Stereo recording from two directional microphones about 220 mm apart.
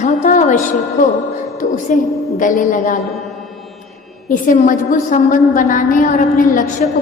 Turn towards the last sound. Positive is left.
turn(degrees=35)  # may be behind; listen again after turning